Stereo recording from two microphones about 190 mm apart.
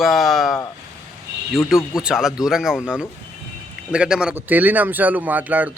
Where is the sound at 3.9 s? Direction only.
5° right (ahead or behind).